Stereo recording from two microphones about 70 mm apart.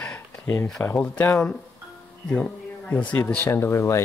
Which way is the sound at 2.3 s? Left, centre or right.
Centre.